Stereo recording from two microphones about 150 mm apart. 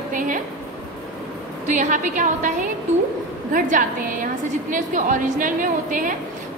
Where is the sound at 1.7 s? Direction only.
55° right (ahead or behind).